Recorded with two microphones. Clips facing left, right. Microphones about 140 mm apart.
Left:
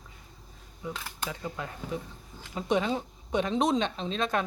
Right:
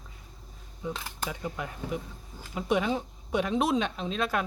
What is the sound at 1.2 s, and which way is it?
Speech, 15° right (ahead or behind).